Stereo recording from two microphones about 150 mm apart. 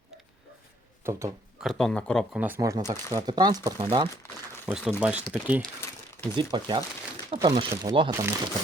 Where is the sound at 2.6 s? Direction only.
25° right (ahead or behind).